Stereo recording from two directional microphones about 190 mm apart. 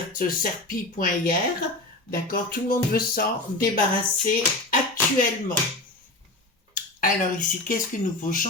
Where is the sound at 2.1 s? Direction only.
50° left (ahead or behind).